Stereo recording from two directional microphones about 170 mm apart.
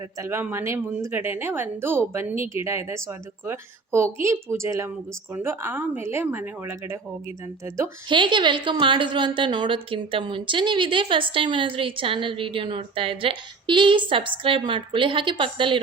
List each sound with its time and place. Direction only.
0.2 s a woman's voice: 15° right (ahead or behind)
8.1 s a woman's voice: 30° right (ahead or behind)